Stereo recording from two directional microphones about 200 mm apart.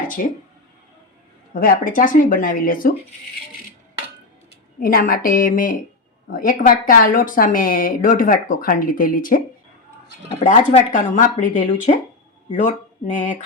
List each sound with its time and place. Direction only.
0.2 s a woman's voice: 45° left (ahead or behind)
1.5 s a woman's voice: 45° left (ahead or behind)
4.8 s a woman's voice: 45° left (ahead or behind)
10.4 s speech: 35° left (ahead or behind)